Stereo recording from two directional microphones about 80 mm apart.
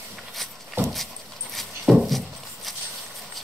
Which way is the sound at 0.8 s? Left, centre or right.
Right.